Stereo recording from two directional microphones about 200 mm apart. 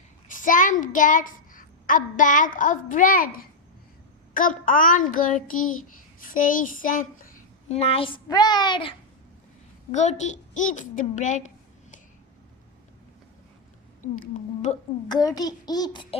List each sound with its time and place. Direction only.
0.3 s a child's voice: 40° left (ahead or behind)
4.4 s child singing: 45° left (ahead or behind)
6.2 s a child's voice: 45° left (ahead or behind); by 9.0 s 25° left (ahead or behind)
9.9 s a woman's voice: 35° left (ahead or behind)
14.7 s speech: 35° left (ahead or behind)
15.1 s a child's voice: 20° left (ahead or behind)